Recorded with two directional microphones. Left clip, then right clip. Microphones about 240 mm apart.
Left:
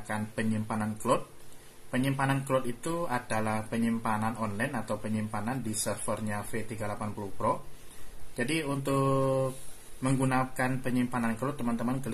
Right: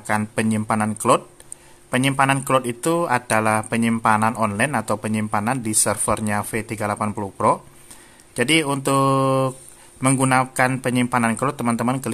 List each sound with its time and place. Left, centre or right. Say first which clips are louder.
0.0 s speech: right 12 dB; right